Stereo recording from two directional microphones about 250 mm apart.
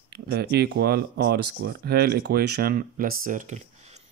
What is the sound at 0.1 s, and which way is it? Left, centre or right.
Speech, right.